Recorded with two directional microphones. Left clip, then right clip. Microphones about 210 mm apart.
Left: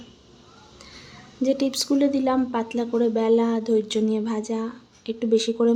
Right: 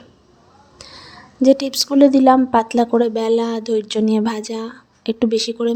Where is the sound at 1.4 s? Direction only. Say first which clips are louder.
Right 8 dB; 35° right (ahead or behind).